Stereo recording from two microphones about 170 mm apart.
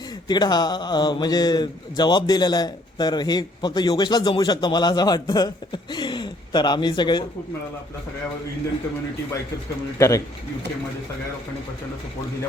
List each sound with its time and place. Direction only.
0.3 s speech: 25° left (ahead or behind)
10.0 s speech: 20° left (ahead or behind)